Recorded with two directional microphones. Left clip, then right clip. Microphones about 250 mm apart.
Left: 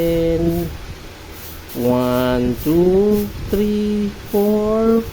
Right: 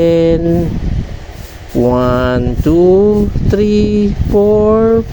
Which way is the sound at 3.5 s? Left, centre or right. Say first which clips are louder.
Right 7 dB; right.